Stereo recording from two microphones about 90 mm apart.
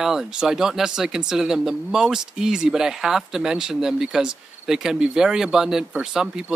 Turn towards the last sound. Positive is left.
turn(degrees=-5)  # may be behind; listen again after turning